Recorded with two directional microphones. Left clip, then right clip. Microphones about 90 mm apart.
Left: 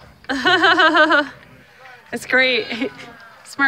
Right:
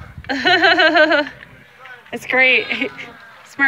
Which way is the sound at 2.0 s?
20° left (ahead or behind).